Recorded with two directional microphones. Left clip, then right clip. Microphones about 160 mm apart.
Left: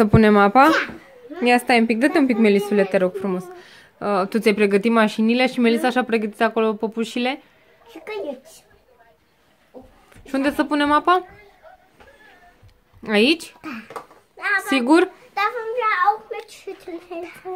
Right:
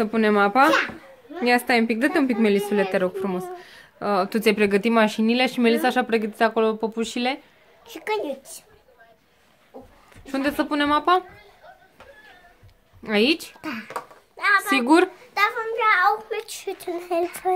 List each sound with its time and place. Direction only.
0.0 s a woman's voice: 30° left (ahead or behind); by 7.3 s 10° left (ahead or behind)
7.9 s a child's voice: 60° right (ahead or behind)
10.2 s a woman's voice: 15° left (ahead or behind)
13.0 s a woman's voice: 20° left (ahead or behind)
13.6 s a child's voice: 45° right (ahead or behind)
14.4 s a sound: 45° right (ahead or behind)
14.7 s a woman's voice: 10° left (ahead or behind)
15.3 s a child's voice: 65° right (ahead or behind); by 17.6 s 50° right (ahead or behind)